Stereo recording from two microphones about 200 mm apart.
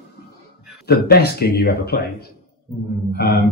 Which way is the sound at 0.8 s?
50° left (ahead or behind).